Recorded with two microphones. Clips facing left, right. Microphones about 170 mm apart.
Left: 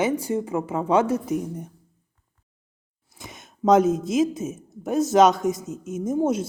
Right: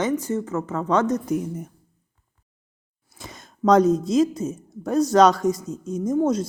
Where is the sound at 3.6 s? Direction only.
5° left (ahead or behind).